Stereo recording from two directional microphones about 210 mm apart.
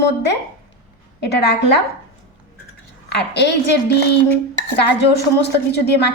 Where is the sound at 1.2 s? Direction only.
55° left (ahead or behind).